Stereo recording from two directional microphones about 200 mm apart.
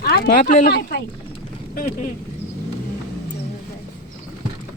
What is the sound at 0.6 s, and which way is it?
Speech, 55° left (ahead or behind).